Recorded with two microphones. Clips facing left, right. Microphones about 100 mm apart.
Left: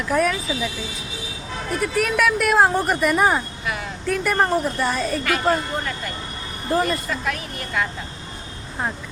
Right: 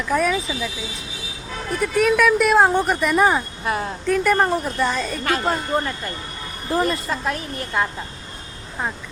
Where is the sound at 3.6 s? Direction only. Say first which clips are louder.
Right 5 dB; 35° right (ahead or behind).